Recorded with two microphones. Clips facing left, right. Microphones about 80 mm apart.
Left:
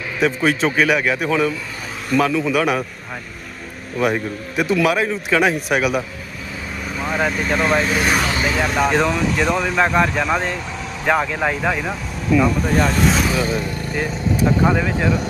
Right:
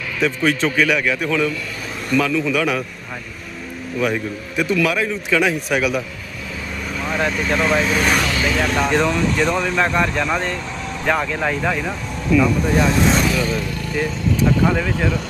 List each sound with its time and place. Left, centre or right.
0.2 s a man's voice: left
3.9 s speech: centre
4.8 s a man's voice: left
6.8 s speech: centre
13.3 s a man's voice: left
15.0 s speech: centre